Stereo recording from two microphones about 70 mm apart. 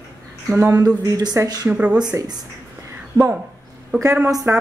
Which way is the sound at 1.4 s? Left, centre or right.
Right.